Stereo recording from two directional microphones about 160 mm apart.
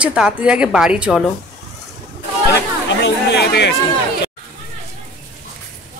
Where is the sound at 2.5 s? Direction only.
90° left.